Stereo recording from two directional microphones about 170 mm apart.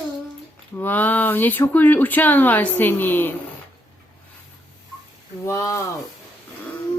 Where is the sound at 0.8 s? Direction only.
10° left (ahead or behind).